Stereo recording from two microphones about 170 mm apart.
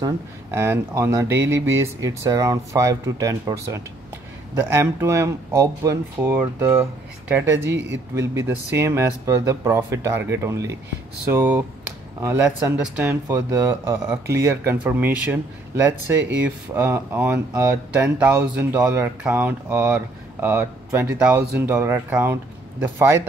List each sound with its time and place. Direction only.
0.0 s speech: 15° right (ahead or behind)